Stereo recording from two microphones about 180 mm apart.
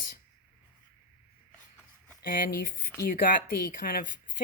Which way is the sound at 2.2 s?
50° left (ahead or behind).